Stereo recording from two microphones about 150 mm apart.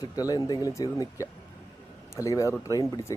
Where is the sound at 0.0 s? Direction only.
25° left (ahead or behind).